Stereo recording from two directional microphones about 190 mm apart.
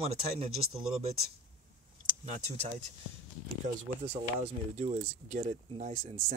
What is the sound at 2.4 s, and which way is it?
Speech, 35° right (ahead or behind).